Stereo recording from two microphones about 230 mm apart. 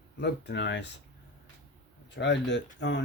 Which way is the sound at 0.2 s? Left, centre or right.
Left.